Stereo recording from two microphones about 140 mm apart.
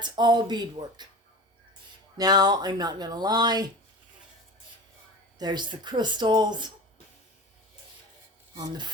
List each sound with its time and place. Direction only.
0.0 s speech: 30° right (ahead or behind)
2.1 s speech: 30° right (ahead or behind)
5.4 s speech: 30° right (ahead or behind)
8.5 s speech: 30° right (ahead or behind)